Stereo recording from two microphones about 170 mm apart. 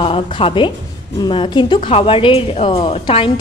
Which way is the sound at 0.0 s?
30° left (ahead or behind).